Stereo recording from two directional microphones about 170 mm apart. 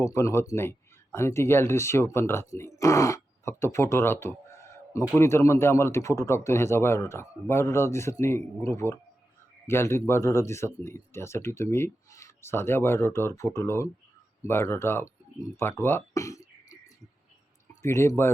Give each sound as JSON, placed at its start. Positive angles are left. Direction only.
{"t": 0.0, "sound": "speech", "side_deg": 15}
{"t": 17.8, "sound": "speech", "side_deg": 15}